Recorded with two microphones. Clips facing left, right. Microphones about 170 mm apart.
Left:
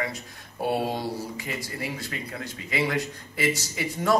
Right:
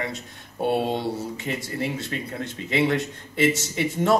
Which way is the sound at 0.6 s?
25° right (ahead or behind).